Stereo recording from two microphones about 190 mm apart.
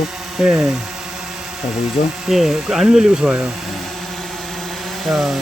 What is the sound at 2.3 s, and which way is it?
Speech, centre (ahead or behind).